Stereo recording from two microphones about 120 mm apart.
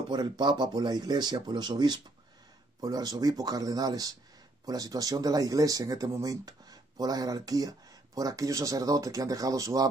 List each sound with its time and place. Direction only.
0.1 s speech: 40° right (ahead or behind)